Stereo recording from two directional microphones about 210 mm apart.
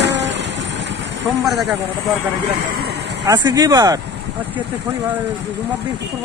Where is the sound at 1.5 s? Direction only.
Centre (ahead or behind).